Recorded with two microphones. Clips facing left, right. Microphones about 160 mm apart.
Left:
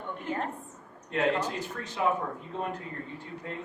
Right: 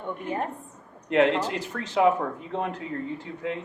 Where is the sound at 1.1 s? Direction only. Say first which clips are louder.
Right 6 dB; 85° right.